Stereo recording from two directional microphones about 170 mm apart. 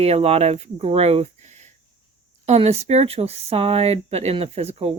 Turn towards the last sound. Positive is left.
turn(degrees=-35)  # may be behind; listen again after turning